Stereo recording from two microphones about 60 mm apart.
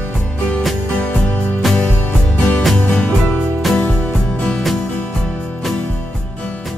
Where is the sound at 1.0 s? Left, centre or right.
Left.